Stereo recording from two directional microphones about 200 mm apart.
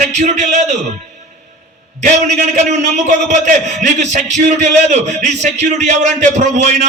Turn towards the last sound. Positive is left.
turn(degrees=-35)  # may be behind; listen again after turning